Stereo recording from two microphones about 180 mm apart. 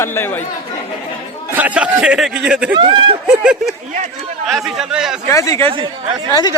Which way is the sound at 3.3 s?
5° right (ahead or behind).